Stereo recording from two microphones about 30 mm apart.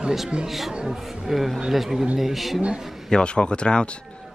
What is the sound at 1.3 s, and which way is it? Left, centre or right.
Speech, centre.